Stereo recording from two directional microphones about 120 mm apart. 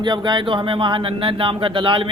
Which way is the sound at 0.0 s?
40° right (ahead or behind).